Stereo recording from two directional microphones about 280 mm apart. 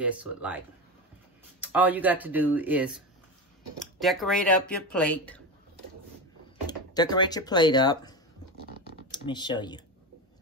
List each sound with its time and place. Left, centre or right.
0.0 s speech: centre
1.6 s speech: centre
4.0 s speech: centre
6.7 s speech: centre